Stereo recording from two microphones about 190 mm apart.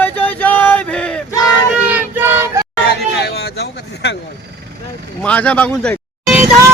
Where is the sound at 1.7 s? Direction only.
10° right (ahead or behind).